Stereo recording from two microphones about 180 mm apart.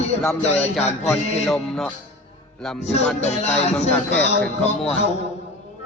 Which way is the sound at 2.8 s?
40° left (ahead or behind).